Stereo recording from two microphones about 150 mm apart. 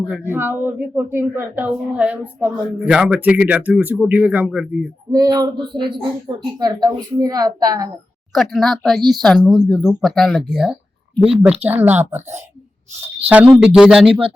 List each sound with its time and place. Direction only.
0.0 s speech: 10° right (ahead or behind)
5.1 s speech: 25° right (ahead or behind)
8.3 s speech: centre (ahead or behind)
11.1 s speech: 40° right (ahead or behind)
11.6 s speech: 15° right (ahead or behind)